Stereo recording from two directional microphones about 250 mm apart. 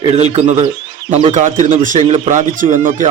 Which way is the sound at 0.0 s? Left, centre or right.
Right.